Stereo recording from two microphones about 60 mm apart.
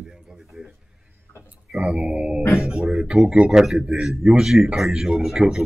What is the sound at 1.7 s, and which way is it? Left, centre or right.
Speech, centre.